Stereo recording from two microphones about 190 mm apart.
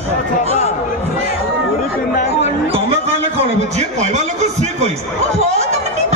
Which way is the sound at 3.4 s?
35° right (ahead or behind).